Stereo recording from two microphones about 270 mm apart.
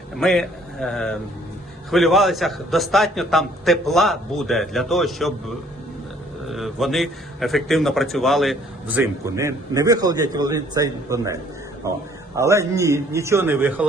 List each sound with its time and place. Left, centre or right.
0.2 s a man's voice: centre
6.5 s a man's voice: centre
12.4 s a man's voice: centre